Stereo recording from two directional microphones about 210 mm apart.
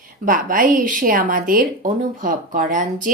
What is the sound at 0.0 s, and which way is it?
Speech, 40° right (ahead or behind).